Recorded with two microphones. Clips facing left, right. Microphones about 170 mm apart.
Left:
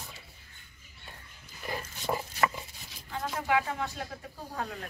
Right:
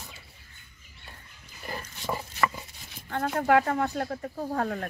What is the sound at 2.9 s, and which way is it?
Speech, 60° right (ahead or behind).